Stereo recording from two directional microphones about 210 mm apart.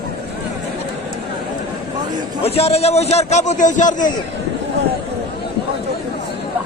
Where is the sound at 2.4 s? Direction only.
30° left (ahead or behind).